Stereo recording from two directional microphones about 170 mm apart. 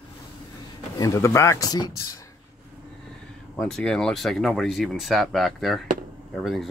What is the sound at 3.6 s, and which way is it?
Speech, 5° left (ahead or behind).